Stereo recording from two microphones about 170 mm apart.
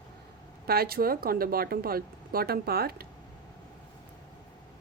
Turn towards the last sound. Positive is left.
turn(degrees=-65)  # may be behind; listen again after turning